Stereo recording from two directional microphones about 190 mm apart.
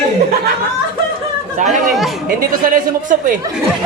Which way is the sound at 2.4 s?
45° right (ahead or behind).